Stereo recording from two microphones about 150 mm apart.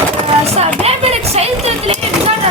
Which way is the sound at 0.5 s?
45° right (ahead or behind).